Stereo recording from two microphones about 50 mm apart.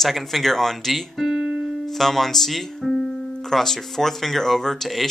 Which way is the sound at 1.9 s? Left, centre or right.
Centre.